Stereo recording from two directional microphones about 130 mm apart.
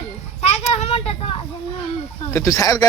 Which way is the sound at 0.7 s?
50° left (ahead or behind).